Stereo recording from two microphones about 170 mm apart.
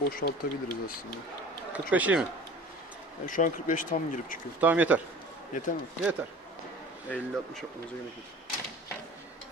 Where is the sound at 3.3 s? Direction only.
50° left (ahead or behind).